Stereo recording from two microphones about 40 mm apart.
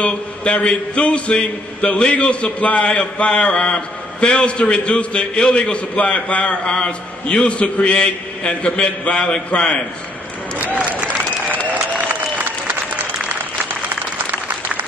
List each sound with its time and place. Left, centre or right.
0.0 s a man's voice: left
11.6 s applause: right
12.1 s applause: right
14.1 s applause: right